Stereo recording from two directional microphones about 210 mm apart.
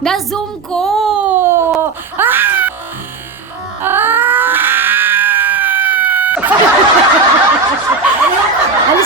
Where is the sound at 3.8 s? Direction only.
10° right (ahead or behind).